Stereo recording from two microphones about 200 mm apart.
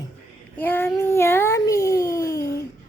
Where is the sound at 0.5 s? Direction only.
10° left (ahead or behind).